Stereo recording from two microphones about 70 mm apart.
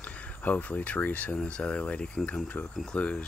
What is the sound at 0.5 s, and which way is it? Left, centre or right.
Speech, left.